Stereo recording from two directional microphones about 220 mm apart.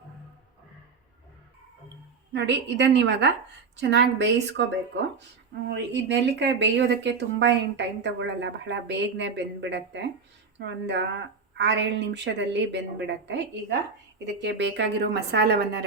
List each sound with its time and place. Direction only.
2.3 s speech: 50° right (ahead or behind)
5.6 s speech: 50° right (ahead or behind)